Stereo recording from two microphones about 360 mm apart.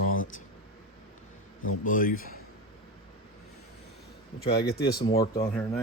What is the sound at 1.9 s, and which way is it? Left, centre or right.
Speech, left.